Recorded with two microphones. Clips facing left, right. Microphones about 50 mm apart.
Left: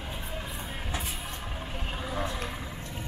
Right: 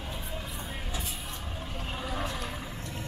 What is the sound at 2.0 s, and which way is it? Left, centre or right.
Vehicle, centre.